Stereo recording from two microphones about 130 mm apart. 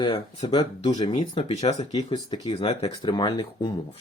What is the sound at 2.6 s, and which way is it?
Speech, 50° left (ahead or behind).